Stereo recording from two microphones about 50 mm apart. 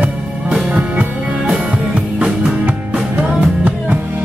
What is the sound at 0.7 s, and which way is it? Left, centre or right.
Music, right.